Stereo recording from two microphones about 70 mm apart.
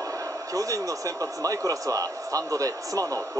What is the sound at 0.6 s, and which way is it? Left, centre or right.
A man's voice, right.